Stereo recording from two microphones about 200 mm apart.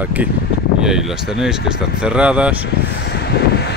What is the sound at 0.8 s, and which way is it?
Speech, centre (ahead or behind).